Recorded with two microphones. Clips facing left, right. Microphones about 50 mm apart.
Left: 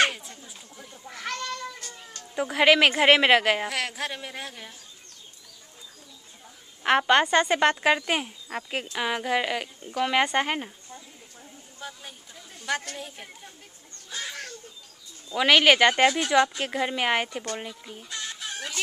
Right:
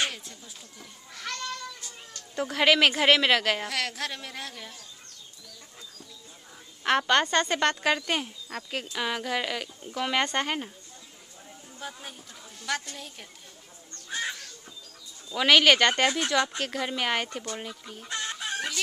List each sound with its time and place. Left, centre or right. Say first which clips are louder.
0.3 s goat: left 2 dB; left
1.8 s cat: left 3 dB; left
2.3 s speech: left 3 dB; centre
6.8 s speech: left 3 dB; centre
11.8 s chatter: even; centre
12.9 s speech: left 4 dB; centre
15.3 s speech: left 1 dB; centre
18.0 s chicken: right 3 dB; right